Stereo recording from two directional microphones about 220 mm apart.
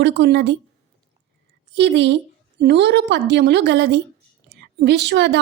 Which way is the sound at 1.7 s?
50° right (ahead or behind).